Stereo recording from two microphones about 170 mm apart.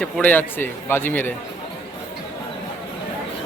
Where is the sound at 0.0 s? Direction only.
10° left (ahead or behind).